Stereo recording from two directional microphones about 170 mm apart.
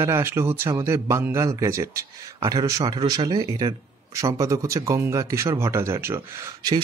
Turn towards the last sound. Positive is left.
turn(degrees=-20)  # may be behind; listen again after turning